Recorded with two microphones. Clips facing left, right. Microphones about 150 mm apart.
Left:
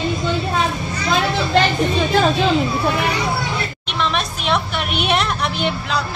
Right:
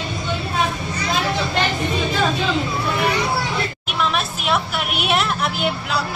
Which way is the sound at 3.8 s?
5° right (ahead or behind).